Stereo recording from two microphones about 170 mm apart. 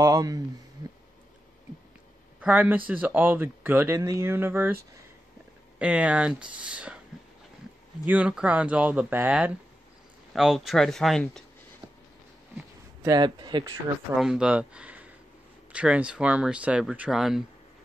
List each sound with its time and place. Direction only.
0.0 s speech: 20° right (ahead or behind)
2.4 s speech: 10° right (ahead or behind)
5.8 s speech: 5° right (ahead or behind)
8.0 s speech: 10° right (ahead or behind)
12.5 s speech: 20° right (ahead or behind)
14.1 s speech: 5° right (ahead or behind)